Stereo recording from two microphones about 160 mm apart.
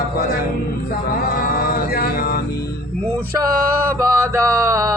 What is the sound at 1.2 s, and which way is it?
Mantra, 65° left (ahead or behind).